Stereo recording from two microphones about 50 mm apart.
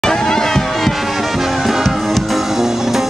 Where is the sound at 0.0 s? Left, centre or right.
Centre.